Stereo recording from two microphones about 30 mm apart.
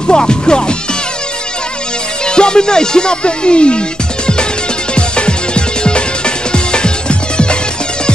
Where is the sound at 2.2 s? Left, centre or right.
Left.